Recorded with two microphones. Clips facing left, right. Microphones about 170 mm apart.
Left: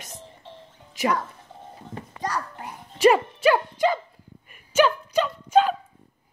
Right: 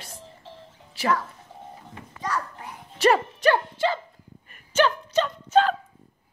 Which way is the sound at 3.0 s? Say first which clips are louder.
Left 2 dB; 10° left (ahead or behind).